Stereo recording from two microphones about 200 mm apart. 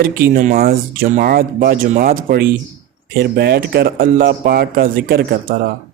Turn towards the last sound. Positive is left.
turn(degrees=-45)  # may be behind; listen again after turning